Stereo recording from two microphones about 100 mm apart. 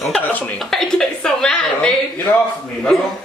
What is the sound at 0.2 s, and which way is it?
Speech, 15° left (ahead or behind).